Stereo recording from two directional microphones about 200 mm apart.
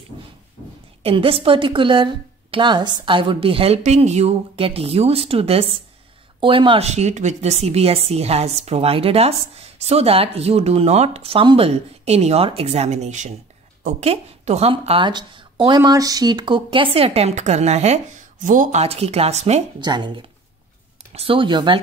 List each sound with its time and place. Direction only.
1.0 s a woman's voice: 30° right (ahead or behind)
19.8 s a woman's voice: 20° right (ahead or behind)